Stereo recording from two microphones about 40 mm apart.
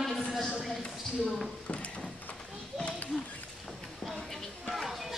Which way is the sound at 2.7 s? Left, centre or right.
Centre.